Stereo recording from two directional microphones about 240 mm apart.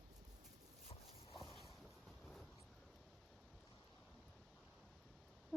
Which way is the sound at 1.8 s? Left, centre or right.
Centre.